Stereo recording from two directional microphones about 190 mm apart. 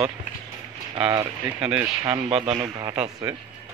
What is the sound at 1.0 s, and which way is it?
Speech, 15° right (ahead or behind).